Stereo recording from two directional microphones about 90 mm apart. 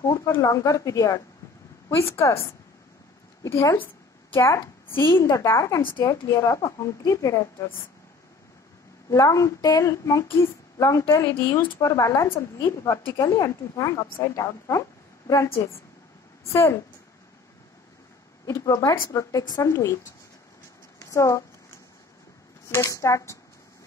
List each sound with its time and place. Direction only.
0.0 s a sound: 35° left (ahead or behind)
0.4 s speech: 35° left (ahead or behind)
1.9 s a woman's voice: 30° left (ahead or behind)
3.4 s a woman's voice: 30° left (ahead or behind)
9.1 s speech: 35° left (ahead or behind)
18.4 s a woman's voice: 40° left (ahead or behind)
21.0 s speech: 35° left (ahead or behind)
22.8 s speech: 35° left (ahead or behind)